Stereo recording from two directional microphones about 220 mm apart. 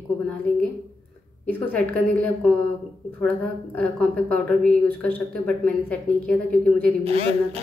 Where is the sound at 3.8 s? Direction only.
5° left (ahead or behind).